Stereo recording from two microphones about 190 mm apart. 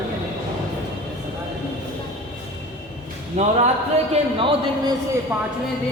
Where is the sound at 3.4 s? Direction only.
35° right (ahead or behind).